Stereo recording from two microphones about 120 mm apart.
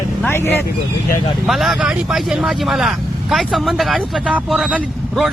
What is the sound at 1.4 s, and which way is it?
Speech, 5° right (ahead or behind).